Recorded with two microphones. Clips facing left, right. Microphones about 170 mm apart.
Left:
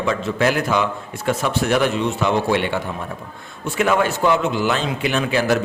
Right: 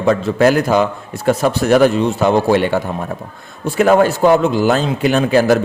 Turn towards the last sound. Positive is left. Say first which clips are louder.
# right 6 dB
turn(degrees=-40)  # may be behind; listen again after turning